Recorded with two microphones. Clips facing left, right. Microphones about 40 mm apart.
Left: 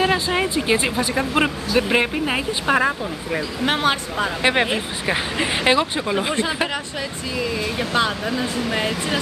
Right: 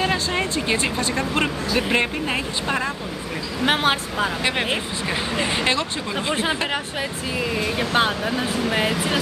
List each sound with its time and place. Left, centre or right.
0.0 s speech: centre
3.6 s speech: right
4.4 s speech: centre
7.3 s speech: centre